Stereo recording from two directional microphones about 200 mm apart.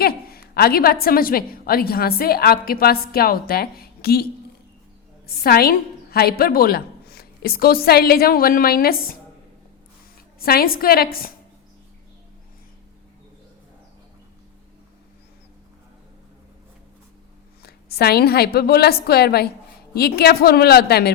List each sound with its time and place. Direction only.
0.0 s a woman's voice: 50° left (ahead or behind)
5.4 s a woman's voice: 50° left (ahead or behind)
10.4 s a woman's voice: 50° left (ahead or behind)
17.6 s a woman's voice: 50° left (ahead or behind)